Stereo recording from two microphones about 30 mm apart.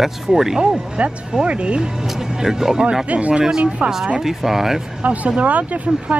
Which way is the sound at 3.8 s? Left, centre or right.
Centre.